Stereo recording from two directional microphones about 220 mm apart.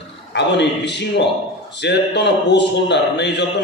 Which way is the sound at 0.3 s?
50° left (ahead or behind).